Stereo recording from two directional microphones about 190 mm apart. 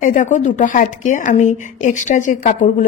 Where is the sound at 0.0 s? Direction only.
40° left (ahead or behind).